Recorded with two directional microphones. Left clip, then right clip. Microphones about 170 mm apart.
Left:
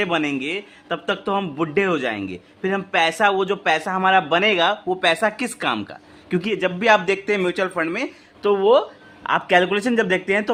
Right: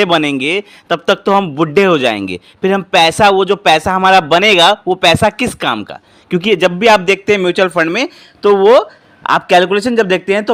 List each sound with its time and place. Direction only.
0.0 s a man's voice: 45° right (ahead or behind)
6.5 s a man's voice: 50° right (ahead or behind)
6.7 s a man's voice: 40° right (ahead or behind)